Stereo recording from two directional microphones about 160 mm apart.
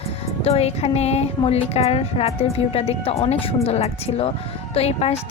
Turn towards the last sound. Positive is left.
turn(degrees=40)  # may be behind; listen again after turning